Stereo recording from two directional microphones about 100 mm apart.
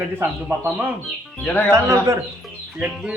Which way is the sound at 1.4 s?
15° left (ahead or behind).